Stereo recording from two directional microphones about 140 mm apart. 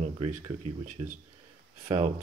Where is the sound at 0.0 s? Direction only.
55° right (ahead or behind).